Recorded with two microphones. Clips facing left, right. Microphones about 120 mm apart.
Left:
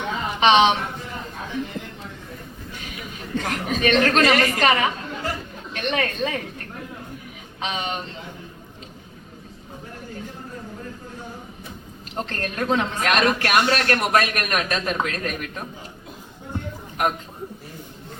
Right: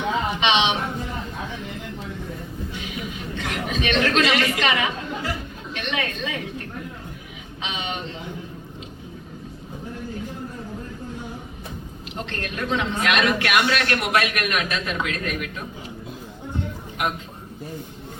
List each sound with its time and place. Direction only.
0.3 s speech: 40° left (ahead or behind)
3.3 s a woman's voice: 40° left (ahead or behind)
7.6 s speech: 40° left (ahead or behind)
12.1 s a man's voice: 40° left (ahead or behind)
17.0 s a man's voice: 40° left (ahead or behind)